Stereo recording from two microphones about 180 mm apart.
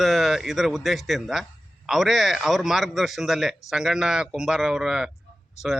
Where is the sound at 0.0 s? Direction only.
Centre (ahead or behind).